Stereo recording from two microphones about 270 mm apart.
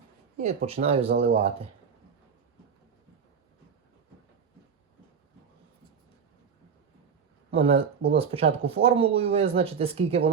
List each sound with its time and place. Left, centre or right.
0.3 s speech: right
7.5 s speech: right